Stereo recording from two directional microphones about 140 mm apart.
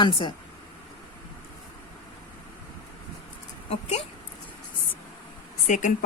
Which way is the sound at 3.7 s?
50° left (ahead or behind).